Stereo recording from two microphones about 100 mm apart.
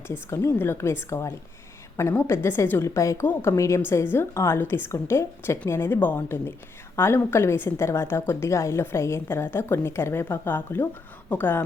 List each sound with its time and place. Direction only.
0.1 s a woman's voice: 25° left (ahead or behind)